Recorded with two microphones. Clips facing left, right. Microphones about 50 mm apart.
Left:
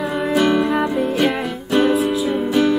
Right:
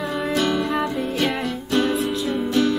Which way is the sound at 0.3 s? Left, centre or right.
Centre.